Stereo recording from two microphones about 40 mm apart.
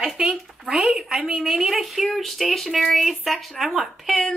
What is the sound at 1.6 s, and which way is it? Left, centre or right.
A woman's voice, centre.